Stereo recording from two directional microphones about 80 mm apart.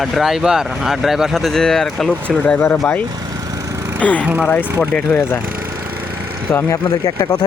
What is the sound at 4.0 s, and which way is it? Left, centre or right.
Speech, centre.